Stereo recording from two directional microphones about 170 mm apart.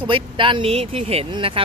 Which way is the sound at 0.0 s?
30° right (ahead or behind).